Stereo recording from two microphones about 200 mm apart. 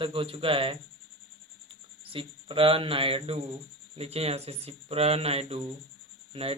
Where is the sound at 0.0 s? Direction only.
25° right (ahead or behind).